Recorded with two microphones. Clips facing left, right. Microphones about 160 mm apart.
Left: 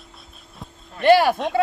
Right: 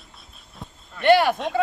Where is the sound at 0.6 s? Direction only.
5° left (ahead or behind).